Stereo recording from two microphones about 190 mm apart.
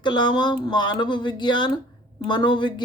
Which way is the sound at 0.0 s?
25° left (ahead or behind).